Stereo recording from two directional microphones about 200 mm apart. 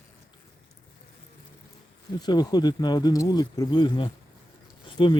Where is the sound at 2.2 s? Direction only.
20° left (ahead or behind).